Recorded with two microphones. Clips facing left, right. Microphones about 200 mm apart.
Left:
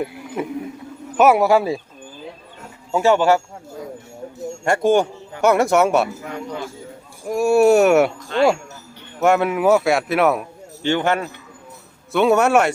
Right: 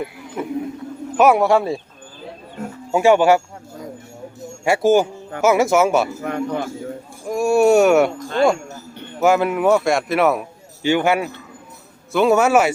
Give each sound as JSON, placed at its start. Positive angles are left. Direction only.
{"t": 1.1, "sound": "speech", "side_deg": 0}
{"t": 2.9, "sound": "speech", "side_deg": -15}
{"t": 4.6, "sound": "speech", "side_deg": -5}
{"t": 6.2, "sound": "a man's voice", "side_deg": -55}
{"t": 7.3, "sound": "speech", "side_deg": 0}
{"t": 8.3, "sound": "speech", "side_deg": -40}
{"t": 9.2, "sound": "speech", "side_deg": 0}